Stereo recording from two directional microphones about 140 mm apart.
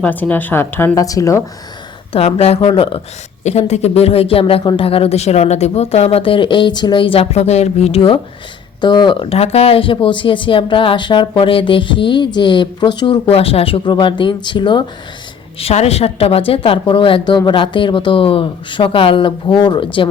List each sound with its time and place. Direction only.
0.0 s a woman's voice: 10° left (ahead or behind)
2.1 s speech: 45° left (ahead or behind)
3.4 s speech: 50° left (ahead or behind); by 14.8 s 35° left (ahead or behind)
15.5 s speech: 45° left (ahead or behind)